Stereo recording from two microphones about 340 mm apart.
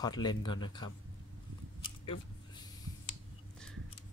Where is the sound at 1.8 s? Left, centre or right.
Centre.